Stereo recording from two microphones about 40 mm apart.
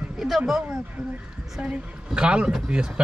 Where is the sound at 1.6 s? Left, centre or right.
Right.